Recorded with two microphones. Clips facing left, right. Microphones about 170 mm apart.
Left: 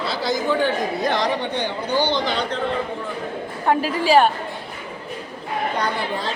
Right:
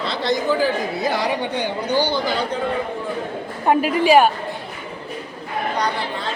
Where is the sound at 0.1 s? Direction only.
Centre (ahead or behind).